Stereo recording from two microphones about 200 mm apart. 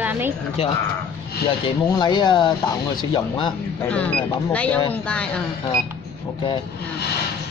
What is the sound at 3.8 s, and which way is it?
Speech, 5° left (ahead or behind).